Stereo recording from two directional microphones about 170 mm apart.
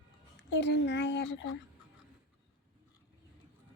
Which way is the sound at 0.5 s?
90° left.